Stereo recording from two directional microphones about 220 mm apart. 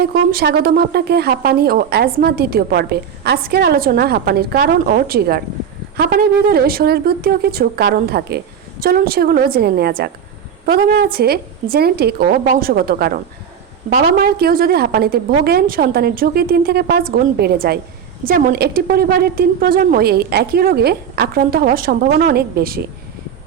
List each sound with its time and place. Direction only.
0.0 s speech: 40° right (ahead or behind)